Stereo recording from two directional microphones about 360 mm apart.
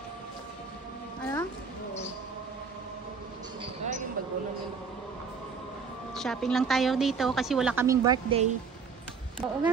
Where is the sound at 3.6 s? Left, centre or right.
Centre.